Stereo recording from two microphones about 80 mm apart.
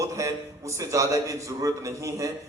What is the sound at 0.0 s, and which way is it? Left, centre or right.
A man's voice, right.